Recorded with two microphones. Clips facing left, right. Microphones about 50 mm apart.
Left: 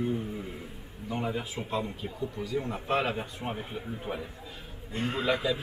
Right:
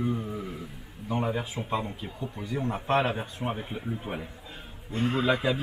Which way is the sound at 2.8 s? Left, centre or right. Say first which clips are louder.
Right 4 dB; right.